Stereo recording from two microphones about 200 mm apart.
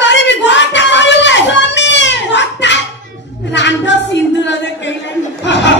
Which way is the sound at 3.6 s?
65° left (ahead or behind).